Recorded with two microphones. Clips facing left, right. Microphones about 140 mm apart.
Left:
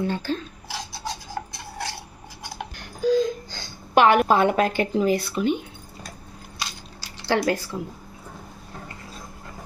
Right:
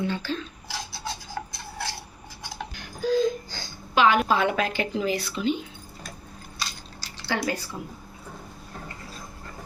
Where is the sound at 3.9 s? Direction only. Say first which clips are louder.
Left 4 dB; 60° left (ahead or behind).